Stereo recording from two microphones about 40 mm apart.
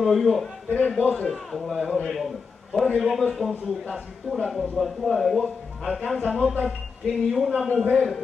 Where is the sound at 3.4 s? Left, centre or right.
Left.